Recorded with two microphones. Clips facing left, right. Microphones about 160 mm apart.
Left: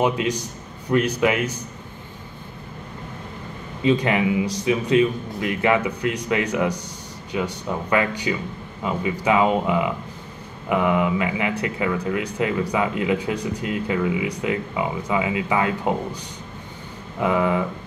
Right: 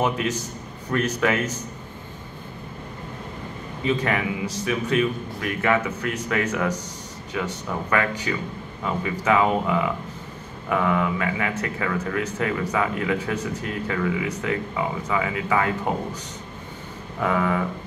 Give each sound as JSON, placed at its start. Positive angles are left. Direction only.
{"t": 0.0, "sound": "speech", "side_deg": 15}
{"t": 3.8, "sound": "speech", "side_deg": 20}
{"t": 17.2, "sound": "speech", "side_deg": 20}